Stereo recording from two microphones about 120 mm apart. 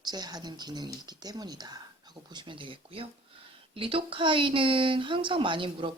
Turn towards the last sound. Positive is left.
turn(degrees=-45)  # may be behind; listen again after turning